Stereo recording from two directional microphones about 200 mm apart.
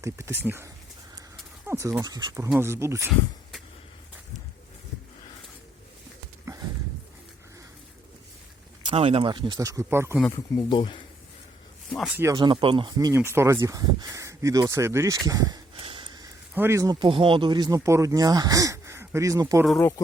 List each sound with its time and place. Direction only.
0.0 s speech: 15° right (ahead or behind)
8.9 s speech: 30° right (ahead or behind); by 10.2 s 10° right (ahead or behind)
10.3 s speech: 25° left (ahead or behind)
11.9 s speech: 5° right (ahead or behind)